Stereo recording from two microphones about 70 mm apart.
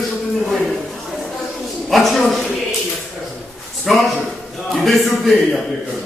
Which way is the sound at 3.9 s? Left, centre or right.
Centre.